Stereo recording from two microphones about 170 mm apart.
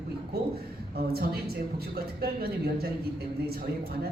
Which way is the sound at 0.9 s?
65° right (ahead or behind).